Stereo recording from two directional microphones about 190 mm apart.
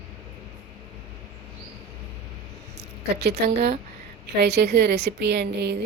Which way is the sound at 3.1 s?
60° right (ahead or behind).